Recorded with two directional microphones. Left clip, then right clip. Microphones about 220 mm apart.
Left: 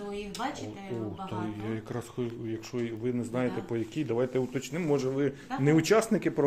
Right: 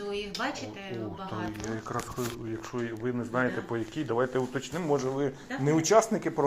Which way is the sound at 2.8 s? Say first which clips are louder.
Even; 30° left (ahead or behind).